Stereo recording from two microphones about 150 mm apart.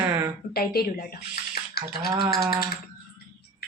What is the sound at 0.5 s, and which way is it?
Speech, 90° left.